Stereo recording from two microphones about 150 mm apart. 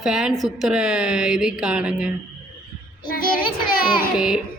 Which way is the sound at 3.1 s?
70° left (ahead or behind).